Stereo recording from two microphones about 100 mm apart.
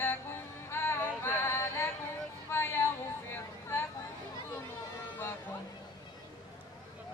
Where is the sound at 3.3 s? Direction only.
25° left (ahead or behind).